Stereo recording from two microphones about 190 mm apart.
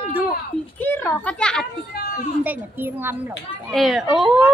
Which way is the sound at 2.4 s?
10° right (ahead or behind).